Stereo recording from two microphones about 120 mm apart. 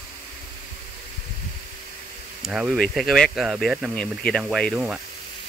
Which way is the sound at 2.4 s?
5° right (ahead or behind).